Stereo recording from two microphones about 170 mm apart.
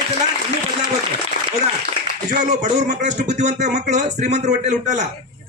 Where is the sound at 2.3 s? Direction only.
45° right (ahead or behind).